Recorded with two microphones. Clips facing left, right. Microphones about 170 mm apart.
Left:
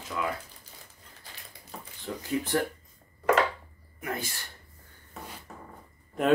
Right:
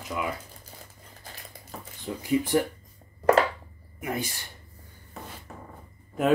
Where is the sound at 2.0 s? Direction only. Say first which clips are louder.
Right 5 dB; 15° right (ahead or behind).